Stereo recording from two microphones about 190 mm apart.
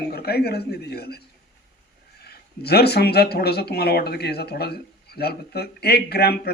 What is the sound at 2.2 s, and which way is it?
Speech, 55° left (ahead or behind).